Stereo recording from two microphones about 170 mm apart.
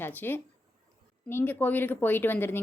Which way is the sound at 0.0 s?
10° left (ahead or behind).